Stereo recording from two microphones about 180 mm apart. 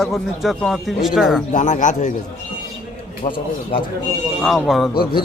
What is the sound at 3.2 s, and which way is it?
Speech, 35° left (ahead or behind).